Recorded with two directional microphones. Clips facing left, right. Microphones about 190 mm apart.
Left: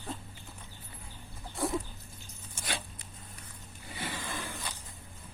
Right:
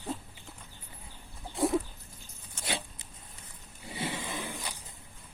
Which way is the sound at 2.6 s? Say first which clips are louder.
Right 3 dB; 25° right (ahead or behind).